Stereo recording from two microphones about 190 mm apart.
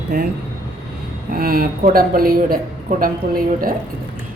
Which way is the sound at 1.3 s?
50° right (ahead or behind).